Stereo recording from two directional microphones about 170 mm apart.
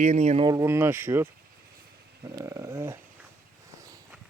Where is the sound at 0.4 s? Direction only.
20° right (ahead or behind).